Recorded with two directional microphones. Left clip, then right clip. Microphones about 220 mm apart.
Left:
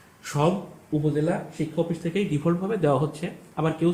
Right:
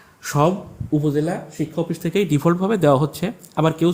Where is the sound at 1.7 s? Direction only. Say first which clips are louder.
Right 5 dB; 50° right (ahead or behind).